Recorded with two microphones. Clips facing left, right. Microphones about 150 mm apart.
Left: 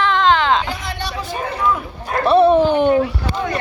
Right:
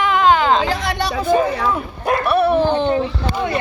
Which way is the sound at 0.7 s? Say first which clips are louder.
Right 5 dB; 85° right.